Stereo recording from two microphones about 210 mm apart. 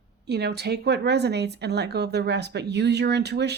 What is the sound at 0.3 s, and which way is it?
Speech, 50° right (ahead or behind).